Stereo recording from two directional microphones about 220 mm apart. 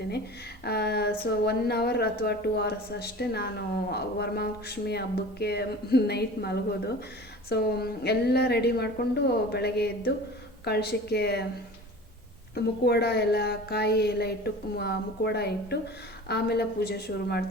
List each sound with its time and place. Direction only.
0.6 s speech: 45° left (ahead or behind)
12.5 s speech: 45° left (ahead or behind)